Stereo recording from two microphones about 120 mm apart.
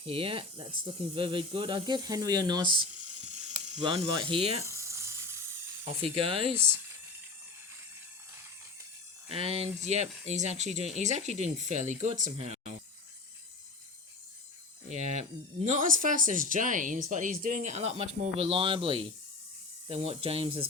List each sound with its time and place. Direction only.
0.0 s speech: 50° right (ahead or behind)
3.2 s ratchet: 70° right (ahead or behind)
3.8 s speech: 45° right (ahead or behind)
4.6 s a sound: 25° right (ahead or behind)
6.0 s speech: 50° right (ahead or behind)
9.3 s speech: 55° right (ahead or behind)
11.6 s speech: 90° right; by 12.7 s 65° right (ahead or behind)
14.8 s speech: 70° right (ahead or behind); by 20.7 s 50° right (ahead or behind)